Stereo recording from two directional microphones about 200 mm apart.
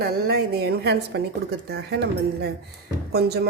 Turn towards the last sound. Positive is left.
turn(degrees=-55)  # may be behind; listen again after turning